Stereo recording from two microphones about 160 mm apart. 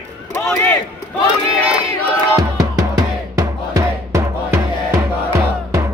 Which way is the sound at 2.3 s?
25° right (ahead or behind).